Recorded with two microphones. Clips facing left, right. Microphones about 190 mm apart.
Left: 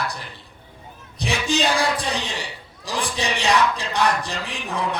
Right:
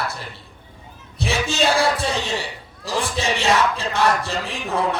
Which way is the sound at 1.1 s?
15° left (ahead or behind).